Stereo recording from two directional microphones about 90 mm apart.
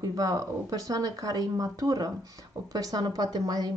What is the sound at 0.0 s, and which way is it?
Speech, 40° right (ahead or behind).